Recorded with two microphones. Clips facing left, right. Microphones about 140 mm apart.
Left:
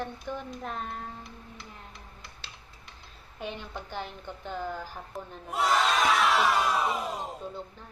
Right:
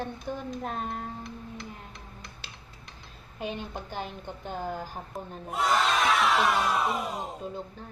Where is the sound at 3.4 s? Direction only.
15° right (ahead or behind).